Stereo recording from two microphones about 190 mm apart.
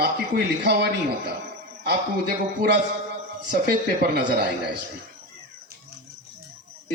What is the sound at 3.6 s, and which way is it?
Speech, 55° right (ahead or behind).